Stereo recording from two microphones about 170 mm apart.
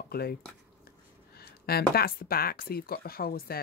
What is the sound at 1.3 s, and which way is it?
Speech, 65° left (ahead or behind).